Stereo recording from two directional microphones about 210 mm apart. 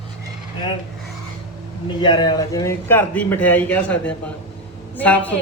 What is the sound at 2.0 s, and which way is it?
A man's voice, 20° left (ahead or behind).